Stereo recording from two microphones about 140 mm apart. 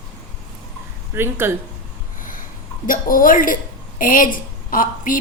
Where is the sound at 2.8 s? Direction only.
80° left.